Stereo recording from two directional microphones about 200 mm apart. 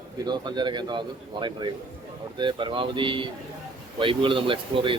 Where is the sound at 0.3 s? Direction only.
20° right (ahead or behind).